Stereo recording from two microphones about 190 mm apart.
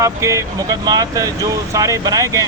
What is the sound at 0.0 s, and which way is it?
A man's voice, 15° right (ahead or behind).